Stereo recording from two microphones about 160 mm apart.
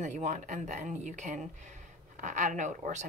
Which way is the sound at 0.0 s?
50° right (ahead or behind).